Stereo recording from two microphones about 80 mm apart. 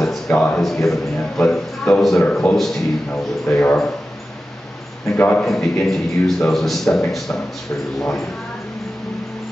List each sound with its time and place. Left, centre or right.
0.0 s a sound: centre
0.6 s a man's voice: centre
3.1 s speech: centre
5.1 s a man's voice: left
5.4 s a man's voice: centre